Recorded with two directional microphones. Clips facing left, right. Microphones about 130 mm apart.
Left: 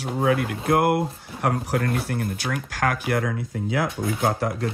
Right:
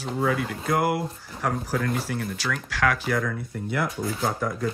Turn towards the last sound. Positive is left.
turn(degrees=60)  # may be behind; listen again after turning